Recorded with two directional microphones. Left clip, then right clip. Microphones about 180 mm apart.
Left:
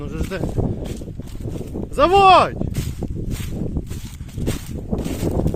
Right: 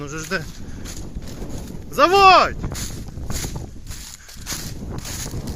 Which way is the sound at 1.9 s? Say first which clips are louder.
Even; 15° left (ahead or behind).